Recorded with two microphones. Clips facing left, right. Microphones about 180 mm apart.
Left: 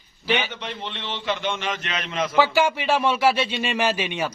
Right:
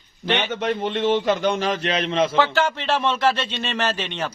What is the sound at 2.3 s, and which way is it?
Speech, 10° left (ahead or behind).